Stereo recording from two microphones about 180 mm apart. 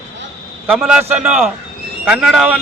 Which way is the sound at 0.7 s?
Centre (ahead or behind).